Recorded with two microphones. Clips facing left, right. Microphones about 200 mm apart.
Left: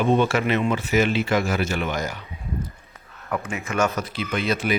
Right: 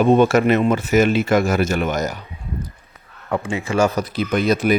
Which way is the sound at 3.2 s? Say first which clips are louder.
Right 5 dB; 30° right (ahead or behind).